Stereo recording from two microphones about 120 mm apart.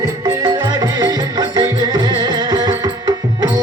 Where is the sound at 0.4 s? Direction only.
35° right (ahead or behind).